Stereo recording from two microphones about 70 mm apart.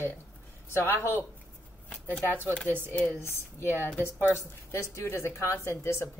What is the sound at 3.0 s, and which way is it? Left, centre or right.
Speech, left.